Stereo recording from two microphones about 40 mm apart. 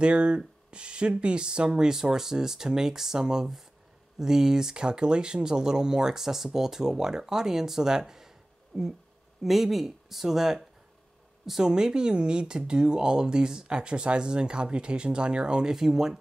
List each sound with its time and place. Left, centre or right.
0.0 s speech: right
8.7 s speech: centre; by 15.7 s right
15.7 s speech: centre